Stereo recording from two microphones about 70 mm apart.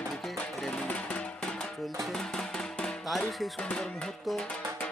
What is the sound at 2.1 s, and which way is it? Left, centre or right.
Music, centre.